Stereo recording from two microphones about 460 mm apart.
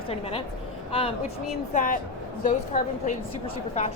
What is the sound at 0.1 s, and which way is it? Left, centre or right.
A woman's voice, centre.